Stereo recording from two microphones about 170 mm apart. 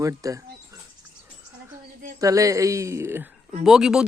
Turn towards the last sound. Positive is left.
turn(degrees=-5)  # may be behind; listen again after turning